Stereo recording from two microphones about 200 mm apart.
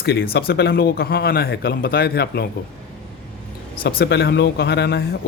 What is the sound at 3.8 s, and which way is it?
Speech, 50° left (ahead or behind).